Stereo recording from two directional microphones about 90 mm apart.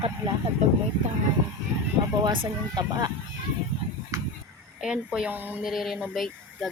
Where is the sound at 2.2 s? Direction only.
55° right (ahead or behind).